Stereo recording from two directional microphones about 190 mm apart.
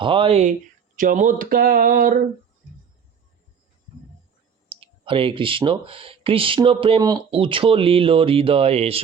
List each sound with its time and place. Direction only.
0.0 s speech: 25° right (ahead or behind)
0.9 s a sound: 45° right (ahead or behind)
4.8 s speech: 25° right (ahead or behind)